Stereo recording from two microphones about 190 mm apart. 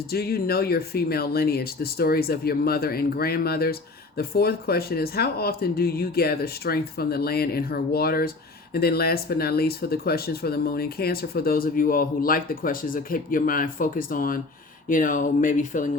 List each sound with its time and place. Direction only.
0.1 s speech: 55° left (ahead or behind)